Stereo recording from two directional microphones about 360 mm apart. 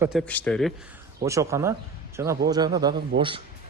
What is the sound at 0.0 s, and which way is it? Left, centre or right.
Speech, centre.